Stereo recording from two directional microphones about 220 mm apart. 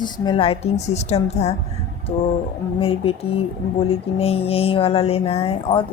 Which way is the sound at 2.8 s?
25° left (ahead or behind).